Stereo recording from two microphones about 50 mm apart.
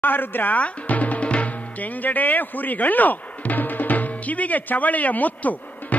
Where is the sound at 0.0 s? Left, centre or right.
Left.